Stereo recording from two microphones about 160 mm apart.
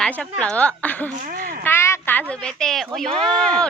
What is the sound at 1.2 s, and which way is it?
Speech, 55° right (ahead or behind).